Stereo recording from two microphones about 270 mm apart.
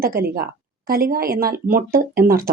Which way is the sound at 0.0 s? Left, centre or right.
Right.